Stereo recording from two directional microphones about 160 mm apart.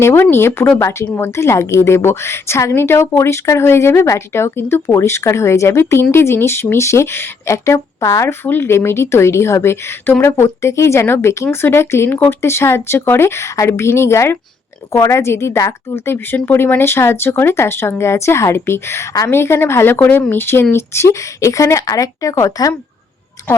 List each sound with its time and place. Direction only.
0.0 s a woman's voice: 15° left (ahead or behind)
23.4 s music: 20° left (ahead or behind)